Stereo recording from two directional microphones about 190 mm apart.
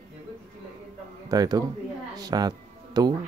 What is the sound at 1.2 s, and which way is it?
A man's voice, 20° right (ahead or behind).